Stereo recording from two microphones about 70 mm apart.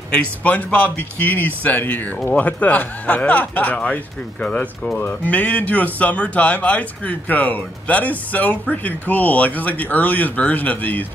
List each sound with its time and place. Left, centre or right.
0.1 s speech: left